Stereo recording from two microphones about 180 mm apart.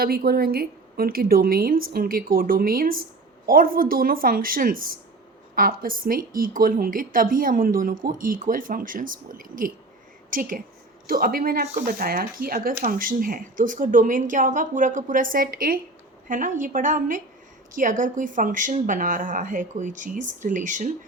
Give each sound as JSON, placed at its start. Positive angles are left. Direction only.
{"t": 0.0, "sound": "a woman's voice", "side_deg": -55}